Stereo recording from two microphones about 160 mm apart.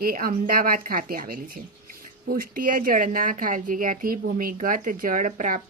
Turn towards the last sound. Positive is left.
turn(degrees=-55)  # may be behind; listen again after turning